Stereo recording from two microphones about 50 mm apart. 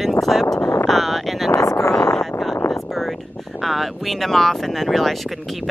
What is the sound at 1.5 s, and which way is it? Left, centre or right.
Speech, left.